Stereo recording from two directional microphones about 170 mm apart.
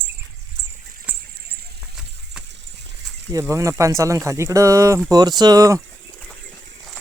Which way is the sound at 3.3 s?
20° right (ahead or behind).